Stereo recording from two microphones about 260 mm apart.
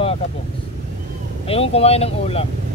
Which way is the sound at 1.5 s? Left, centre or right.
Left.